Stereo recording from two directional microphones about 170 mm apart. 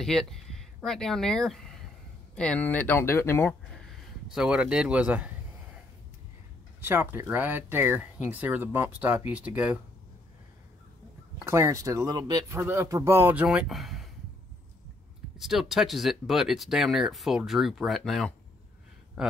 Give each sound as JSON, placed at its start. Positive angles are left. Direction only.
{"t": 0.0, "sound": "speech", "side_deg": 0}
{"t": 4.3, "sound": "speech", "side_deg": -5}
{"t": 6.8, "sound": "speech", "side_deg": -15}
{"t": 11.4, "sound": "speech", "side_deg": -15}
{"t": 15.3, "sound": "speech", "side_deg": 0}